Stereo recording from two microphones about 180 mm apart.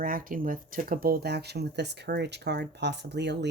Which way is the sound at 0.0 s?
50° right (ahead or behind).